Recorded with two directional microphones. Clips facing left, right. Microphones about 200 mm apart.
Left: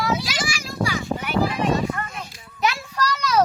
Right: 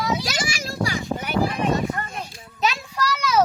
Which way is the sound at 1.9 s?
30° right (ahead or behind).